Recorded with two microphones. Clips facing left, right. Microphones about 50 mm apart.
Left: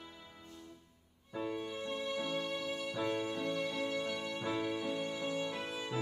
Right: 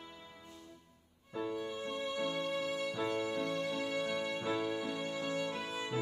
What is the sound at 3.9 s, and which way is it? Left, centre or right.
Music, right.